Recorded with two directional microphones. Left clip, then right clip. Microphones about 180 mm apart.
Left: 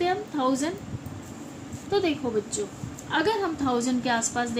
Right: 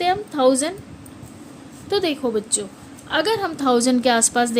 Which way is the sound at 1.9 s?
65° right (ahead or behind).